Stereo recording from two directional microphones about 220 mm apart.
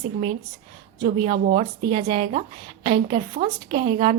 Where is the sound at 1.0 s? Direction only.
25° right (ahead or behind).